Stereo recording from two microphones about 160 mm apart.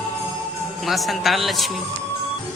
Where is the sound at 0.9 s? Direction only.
Centre (ahead or behind).